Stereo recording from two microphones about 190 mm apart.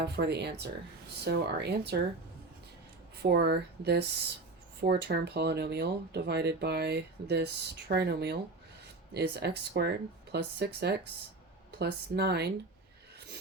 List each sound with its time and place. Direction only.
0.0 s speech: 60° right (ahead or behind)
3.2 s speech: 60° right (ahead or behind)